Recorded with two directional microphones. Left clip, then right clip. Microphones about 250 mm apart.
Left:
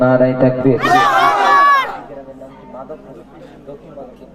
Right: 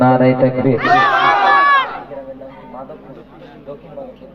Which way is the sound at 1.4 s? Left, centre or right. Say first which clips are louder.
Left 1 dB; centre.